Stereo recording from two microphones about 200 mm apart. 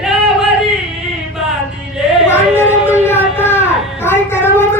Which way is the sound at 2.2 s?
10° left (ahead or behind).